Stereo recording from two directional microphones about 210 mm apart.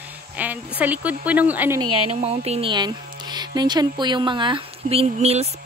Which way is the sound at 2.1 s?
30° right (ahead or behind).